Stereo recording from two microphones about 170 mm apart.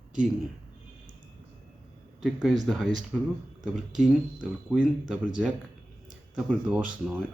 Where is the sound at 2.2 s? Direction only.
Centre (ahead or behind).